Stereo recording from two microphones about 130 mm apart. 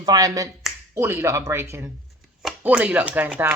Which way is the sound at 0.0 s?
30° right (ahead or behind).